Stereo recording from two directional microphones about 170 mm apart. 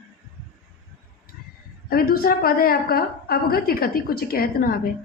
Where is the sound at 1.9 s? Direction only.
60° left (ahead or behind).